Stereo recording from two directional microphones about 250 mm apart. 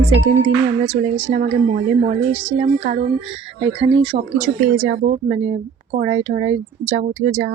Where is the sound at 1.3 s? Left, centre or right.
Right.